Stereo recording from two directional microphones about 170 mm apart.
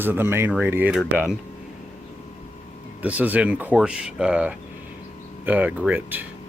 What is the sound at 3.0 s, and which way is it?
Speech, 10° right (ahead or behind).